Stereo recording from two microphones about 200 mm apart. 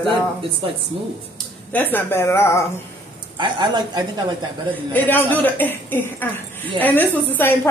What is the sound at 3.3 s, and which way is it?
Speech, 25° right (ahead or behind).